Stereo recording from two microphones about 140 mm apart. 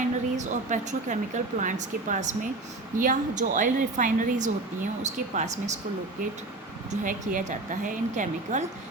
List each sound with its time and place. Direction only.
0.0 s speech: 60° right (ahead or behind)
5.0 s speech: 55° right (ahead or behind)
7.0 s a woman's voice: 70° right (ahead or behind)